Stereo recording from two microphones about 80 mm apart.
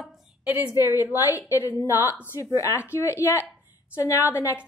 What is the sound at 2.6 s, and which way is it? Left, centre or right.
Speech, left.